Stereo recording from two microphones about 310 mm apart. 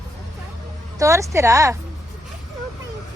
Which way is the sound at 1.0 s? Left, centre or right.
Centre.